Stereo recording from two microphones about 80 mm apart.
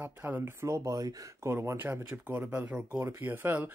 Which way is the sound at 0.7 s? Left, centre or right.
Right.